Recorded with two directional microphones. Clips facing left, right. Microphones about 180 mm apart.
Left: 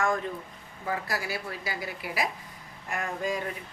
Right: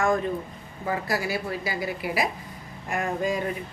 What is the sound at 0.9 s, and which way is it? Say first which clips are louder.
A woman's voice: right 5 dB; 15° right (ahead or behind).